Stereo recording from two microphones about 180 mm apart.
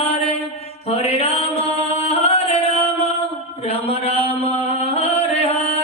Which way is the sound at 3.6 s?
35° left (ahead or behind).